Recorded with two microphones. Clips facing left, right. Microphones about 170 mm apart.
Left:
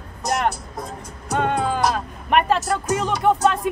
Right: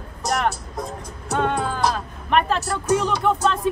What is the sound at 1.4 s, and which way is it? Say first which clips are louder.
Speech: left 1 dB; 10° left (ahead or behind).